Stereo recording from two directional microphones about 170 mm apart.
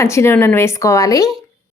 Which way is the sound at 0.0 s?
15° left (ahead or behind).